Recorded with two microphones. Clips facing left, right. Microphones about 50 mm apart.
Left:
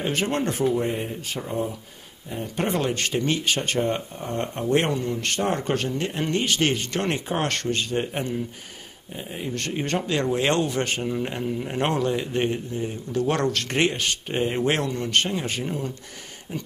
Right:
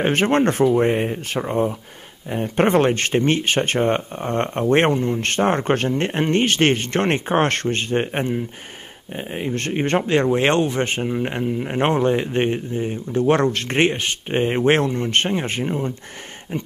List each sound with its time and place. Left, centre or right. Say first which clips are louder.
0.0 s speech: right 7 dB; right